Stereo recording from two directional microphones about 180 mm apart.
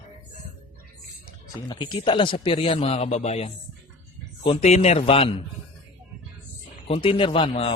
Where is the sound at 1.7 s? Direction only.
25° left (ahead or behind).